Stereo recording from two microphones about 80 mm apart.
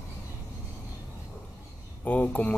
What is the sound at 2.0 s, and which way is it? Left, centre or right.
Speech, centre.